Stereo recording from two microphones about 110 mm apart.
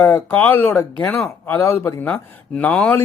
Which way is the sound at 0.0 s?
15° left (ahead or behind).